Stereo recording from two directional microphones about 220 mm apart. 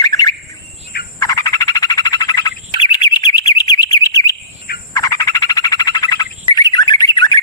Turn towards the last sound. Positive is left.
turn(degrees=20)  # may be behind; listen again after turning